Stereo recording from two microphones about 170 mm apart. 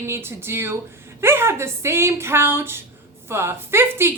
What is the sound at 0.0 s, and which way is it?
A woman's voice, 15° right (ahead or behind).